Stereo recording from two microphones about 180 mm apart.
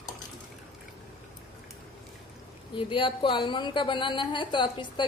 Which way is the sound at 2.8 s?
30° left (ahead or behind).